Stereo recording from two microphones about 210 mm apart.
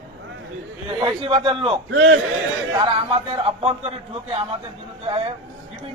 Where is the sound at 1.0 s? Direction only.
25° right (ahead or behind).